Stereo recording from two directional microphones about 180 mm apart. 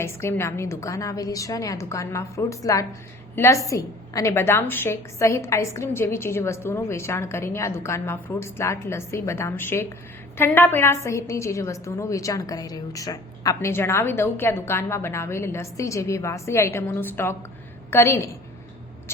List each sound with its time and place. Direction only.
0.0 s a woman's voice: 15° left (ahead or behind)